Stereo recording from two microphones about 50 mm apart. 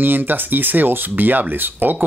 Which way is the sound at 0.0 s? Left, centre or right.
Right.